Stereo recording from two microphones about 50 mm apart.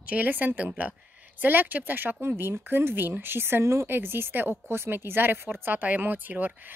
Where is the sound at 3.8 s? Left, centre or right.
Right.